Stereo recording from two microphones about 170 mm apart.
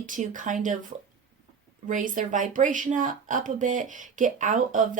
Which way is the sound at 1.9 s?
50° right (ahead or behind).